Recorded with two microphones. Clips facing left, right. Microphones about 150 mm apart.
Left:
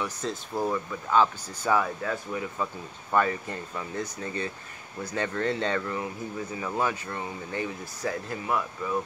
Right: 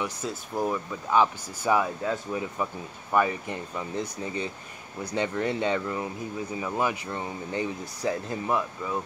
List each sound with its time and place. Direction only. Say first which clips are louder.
0.0 s speech: even; 10° right (ahead or behind)